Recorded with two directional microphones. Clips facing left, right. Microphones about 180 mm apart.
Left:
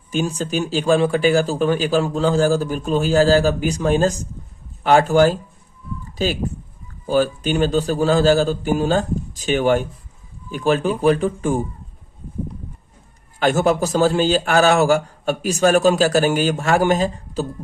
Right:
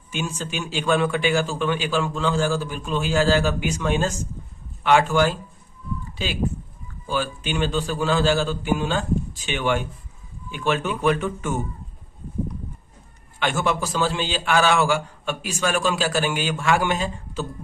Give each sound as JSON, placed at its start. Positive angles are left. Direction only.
{"t": 0.1, "sound": "speech", "side_deg": 40}
{"t": 13.4, "sound": "a man's voice", "side_deg": 40}